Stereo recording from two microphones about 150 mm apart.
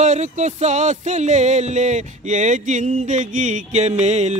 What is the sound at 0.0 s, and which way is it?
Music, 50° right (ahead or behind).